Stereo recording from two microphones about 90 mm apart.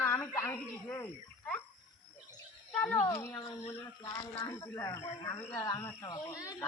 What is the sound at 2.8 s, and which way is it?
Speech, 20° left (ahead or behind).